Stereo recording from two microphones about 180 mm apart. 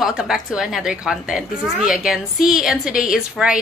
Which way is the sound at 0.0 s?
5° right (ahead or behind).